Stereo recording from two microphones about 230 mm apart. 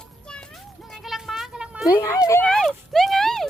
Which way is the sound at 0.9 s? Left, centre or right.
Centre.